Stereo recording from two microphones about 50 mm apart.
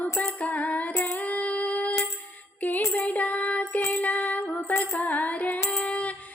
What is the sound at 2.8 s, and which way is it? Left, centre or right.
Music, left.